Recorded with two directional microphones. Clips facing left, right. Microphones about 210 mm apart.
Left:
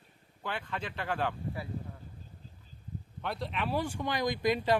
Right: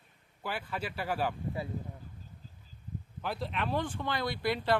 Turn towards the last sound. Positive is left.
turn(degrees=15)  # may be behind; listen again after turning